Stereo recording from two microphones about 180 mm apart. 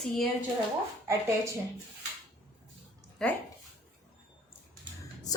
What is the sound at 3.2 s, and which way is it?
Speech, 5° left (ahead or behind).